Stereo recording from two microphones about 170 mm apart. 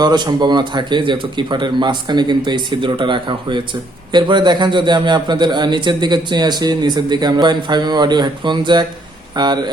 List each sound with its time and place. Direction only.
0.0 s a man's voice: 25° right (ahead or behind)